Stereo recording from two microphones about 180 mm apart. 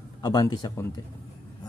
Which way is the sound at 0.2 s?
20° left (ahead or behind).